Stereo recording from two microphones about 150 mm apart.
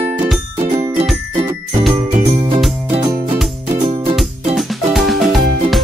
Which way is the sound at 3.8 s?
35° right (ahead or behind).